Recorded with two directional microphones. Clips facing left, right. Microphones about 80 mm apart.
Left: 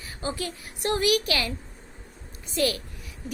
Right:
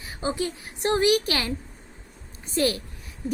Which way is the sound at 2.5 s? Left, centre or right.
Right.